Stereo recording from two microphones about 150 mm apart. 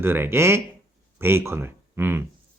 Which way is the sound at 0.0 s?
15° right (ahead or behind).